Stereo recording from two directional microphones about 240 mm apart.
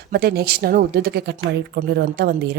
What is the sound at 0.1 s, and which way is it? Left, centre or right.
A woman's voice, right.